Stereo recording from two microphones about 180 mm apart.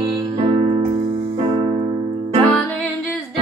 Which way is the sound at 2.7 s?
10° left (ahead or behind).